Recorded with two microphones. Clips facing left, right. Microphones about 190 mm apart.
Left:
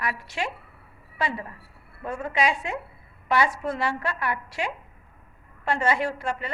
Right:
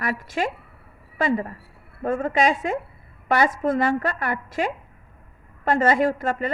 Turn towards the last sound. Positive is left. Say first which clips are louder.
# right 7 dB
turn(degrees=-45)  # may be behind; listen again after turning